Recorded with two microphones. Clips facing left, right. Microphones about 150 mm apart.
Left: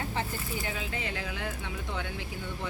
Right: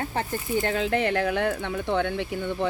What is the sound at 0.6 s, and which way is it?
Speech, 70° right (ahead or behind).